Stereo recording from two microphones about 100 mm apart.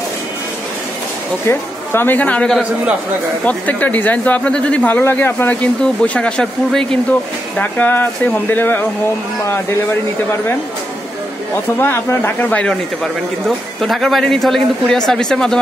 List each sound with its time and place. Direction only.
1.4 s speech: 25° left (ahead or behind)
11.5 s speech: 25° left (ahead or behind); by 15.6 s 5° left (ahead or behind)